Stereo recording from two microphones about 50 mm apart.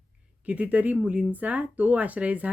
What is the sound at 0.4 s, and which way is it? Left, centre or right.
Speech, right.